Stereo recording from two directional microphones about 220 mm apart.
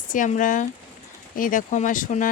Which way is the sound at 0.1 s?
35° left (ahead or behind).